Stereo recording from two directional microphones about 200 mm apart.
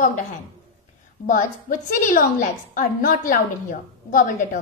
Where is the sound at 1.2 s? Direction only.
40° left (ahead or behind).